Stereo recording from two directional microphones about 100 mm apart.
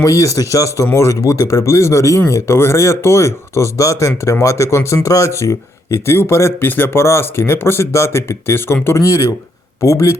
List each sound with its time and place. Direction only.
0.0 s speech: 35° left (ahead or behind)